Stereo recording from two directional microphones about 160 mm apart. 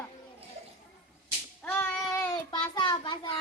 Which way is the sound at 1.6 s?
10° left (ahead or behind).